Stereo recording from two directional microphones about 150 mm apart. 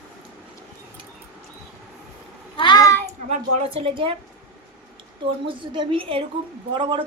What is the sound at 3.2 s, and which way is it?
Speech, 45° right (ahead or behind).